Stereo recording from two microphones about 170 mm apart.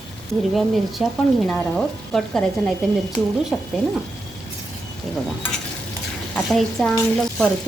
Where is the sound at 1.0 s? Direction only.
Centre (ahead or behind).